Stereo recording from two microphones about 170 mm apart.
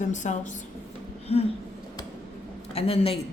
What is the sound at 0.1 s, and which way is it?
A woman's voice, 45° left (ahead or behind).